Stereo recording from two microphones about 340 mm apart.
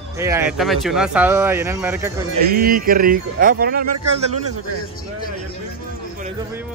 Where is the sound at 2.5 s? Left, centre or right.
Right.